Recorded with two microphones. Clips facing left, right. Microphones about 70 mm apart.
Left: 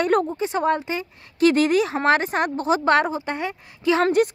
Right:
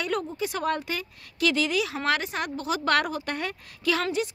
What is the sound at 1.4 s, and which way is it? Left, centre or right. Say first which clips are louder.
Speech: left 8 dB; left.